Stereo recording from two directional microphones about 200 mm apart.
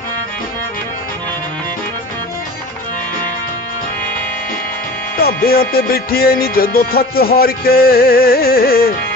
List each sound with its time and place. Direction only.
5.1 s music: 50° left (ahead or behind)